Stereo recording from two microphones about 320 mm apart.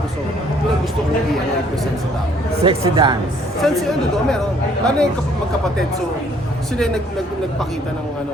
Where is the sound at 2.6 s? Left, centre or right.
Centre.